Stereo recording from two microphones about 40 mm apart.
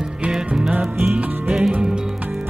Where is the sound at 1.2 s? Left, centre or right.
Right.